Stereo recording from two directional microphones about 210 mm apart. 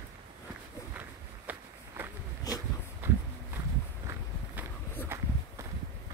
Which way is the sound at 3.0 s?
10° right (ahead or behind).